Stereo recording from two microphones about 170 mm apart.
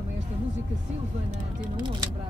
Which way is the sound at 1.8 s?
25° right (ahead or behind).